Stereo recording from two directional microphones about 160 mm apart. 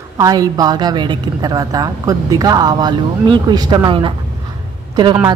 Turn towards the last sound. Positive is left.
turn(degrees=-30)  # may be behind; listen again after turning